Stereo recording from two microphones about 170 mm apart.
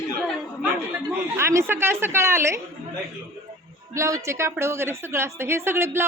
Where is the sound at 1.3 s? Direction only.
15° right (ahead or behind).